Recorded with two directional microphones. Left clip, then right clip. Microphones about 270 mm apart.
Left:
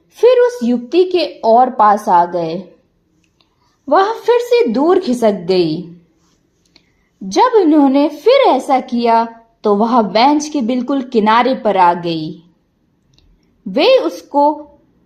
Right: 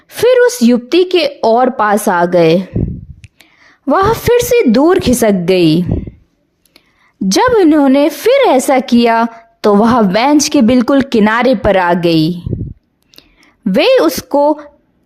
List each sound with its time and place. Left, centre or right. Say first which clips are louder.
0.3 s a woman's voice: right 2 dB; right
3.8 s a woman's voice: right 2 dB; right
7.3 s a woman's voice: right 2 dB; right
13.7 s a woman's voice: right 2 dB; right